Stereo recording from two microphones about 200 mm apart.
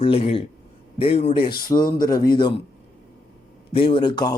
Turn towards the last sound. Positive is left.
turn(degrees=20)  # may be behind; listen again after turning